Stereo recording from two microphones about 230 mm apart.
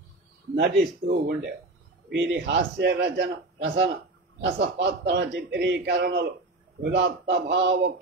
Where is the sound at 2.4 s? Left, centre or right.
Right.